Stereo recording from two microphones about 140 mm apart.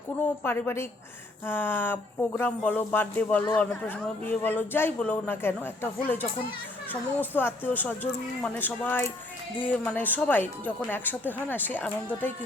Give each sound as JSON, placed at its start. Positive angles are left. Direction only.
{"t": 0.4, "sound": "speech", "side_deg": 15}